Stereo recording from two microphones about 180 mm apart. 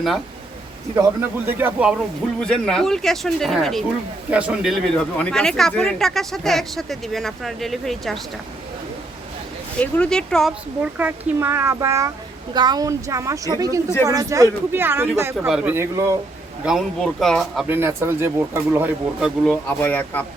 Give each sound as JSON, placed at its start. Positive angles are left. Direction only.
{"t": 1.5, "sound": "speech", "side_deg": -10}
{"t": 9.7, "sound": "speech", "side_deg": 5}
{"t": 10.9, "sound": "a woman's voice", "side_deg": -10}
{"t": 16.6, "sound": "speech", "side_deg": 0}
{"t": 17.7, "sound": "speech", "side_deg": -15}
{"t": 19.5, "sound": "speech", "side_deg": 10}